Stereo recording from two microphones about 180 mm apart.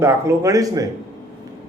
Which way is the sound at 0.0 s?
15° right (ahead or behind).